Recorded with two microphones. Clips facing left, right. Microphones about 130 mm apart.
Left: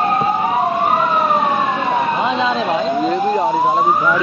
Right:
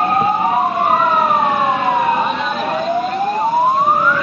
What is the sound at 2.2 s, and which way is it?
Vehicle, 25° left (ahead or behind).